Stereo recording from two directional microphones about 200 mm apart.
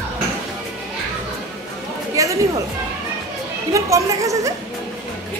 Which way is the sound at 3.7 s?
15° right (ahead or behind).